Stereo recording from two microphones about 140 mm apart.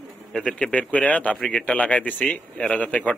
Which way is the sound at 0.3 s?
5° left (ahead or behind).